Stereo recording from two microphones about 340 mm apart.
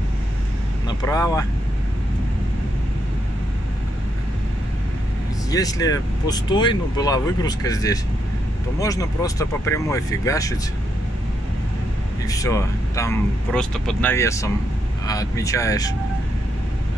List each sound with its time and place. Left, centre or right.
0.8 s speech: centre
5.5 s speech: centre
12.3 s speech: centre